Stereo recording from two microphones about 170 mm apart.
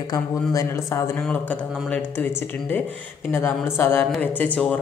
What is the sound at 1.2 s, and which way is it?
Speech, 5° left (ahead or behind).